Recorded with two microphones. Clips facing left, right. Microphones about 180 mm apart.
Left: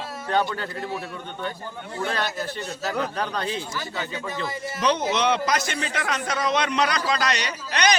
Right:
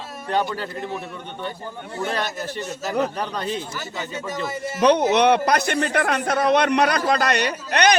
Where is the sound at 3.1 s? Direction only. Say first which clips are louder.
Right 1 dB; 10° right (ahead or behind).